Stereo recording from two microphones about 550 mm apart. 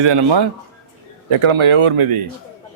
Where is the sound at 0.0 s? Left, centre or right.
Right.